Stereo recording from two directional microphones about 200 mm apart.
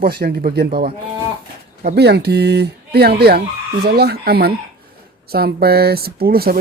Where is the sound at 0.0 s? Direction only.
50° right (ahead or behind).